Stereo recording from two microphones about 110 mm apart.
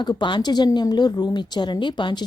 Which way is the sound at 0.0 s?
45° left (ahead or behind).